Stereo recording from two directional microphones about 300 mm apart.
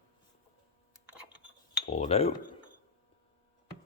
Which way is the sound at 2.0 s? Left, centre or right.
Left.